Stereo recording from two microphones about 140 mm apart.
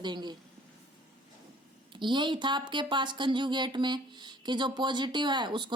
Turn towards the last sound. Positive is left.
turn(degrees=-35)  # may be behind; listen again after turning